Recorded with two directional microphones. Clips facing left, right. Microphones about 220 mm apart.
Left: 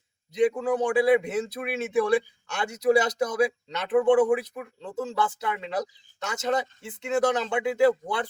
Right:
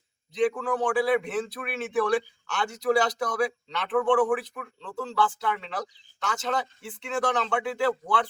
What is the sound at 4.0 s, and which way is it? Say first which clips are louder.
A man's voice: left 3 dB; 20° left (ahead or behind).